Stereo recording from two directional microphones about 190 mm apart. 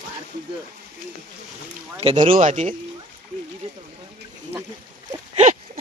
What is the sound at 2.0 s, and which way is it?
Speech, 30° right (ahead or behind).